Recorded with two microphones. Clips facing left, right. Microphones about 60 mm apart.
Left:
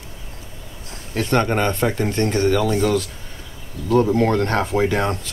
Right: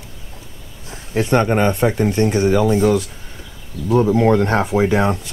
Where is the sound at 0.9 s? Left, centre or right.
Centre.